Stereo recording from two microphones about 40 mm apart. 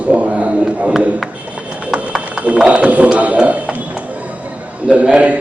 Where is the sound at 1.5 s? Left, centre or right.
Right.